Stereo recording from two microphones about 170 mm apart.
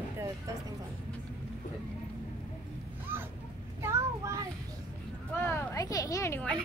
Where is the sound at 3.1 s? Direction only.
15° right (ahead or behind).